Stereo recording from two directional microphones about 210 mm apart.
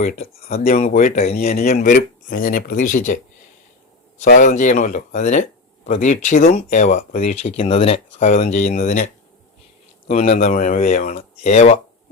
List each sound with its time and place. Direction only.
0.0 s speech: 30° left (ahead or behind)
4.2 s speech: 35° left (ahead or behind)
10.1 s speech: 35° left (ahead or behind)